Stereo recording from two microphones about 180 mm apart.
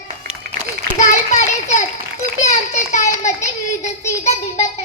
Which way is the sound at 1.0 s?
40° left (ahead or behind).